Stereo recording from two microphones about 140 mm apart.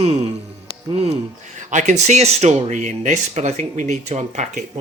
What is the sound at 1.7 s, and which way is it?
Speech, 60° right (ahead or behind).